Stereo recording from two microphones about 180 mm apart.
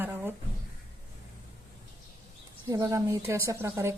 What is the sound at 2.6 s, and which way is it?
A woman's voice, 20° right (ahead or behind).